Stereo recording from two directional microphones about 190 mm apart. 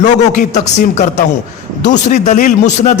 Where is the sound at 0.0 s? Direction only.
40° left (ahead or behind).